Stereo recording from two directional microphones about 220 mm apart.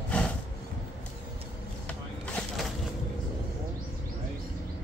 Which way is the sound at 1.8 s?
5° left (ahead or behind).